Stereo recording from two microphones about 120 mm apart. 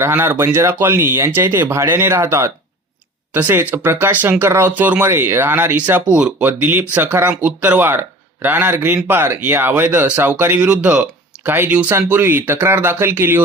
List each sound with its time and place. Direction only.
0.0 s speech: 20° right (ahead or behind)